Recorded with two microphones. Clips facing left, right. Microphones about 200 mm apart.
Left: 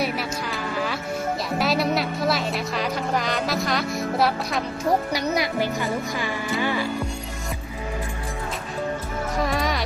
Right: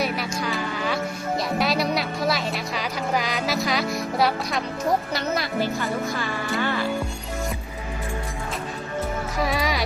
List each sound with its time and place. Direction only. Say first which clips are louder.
0.0 s music: even; centre (ahead or behind)
1.6 s a woman's voice: left 3 dB; centre (ahead or behind)
5.1 s a woman's voice: left 2 dB; 15° left (ahead or behind)
9.4 s music: even; 5° right (ahead or behind)